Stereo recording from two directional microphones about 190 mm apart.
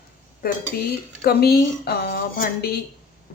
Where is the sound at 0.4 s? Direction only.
50° left (ahead or behind).